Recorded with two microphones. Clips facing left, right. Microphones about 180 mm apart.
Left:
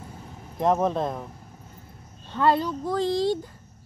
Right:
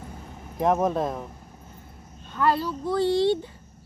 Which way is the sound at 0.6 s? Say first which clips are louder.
Even; 10° right (ahead or behind).